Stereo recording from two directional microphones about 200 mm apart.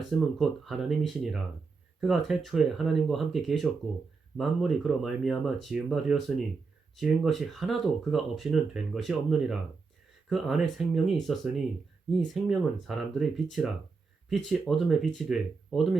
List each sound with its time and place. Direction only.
0.3 s speech: centre (ahead or behind)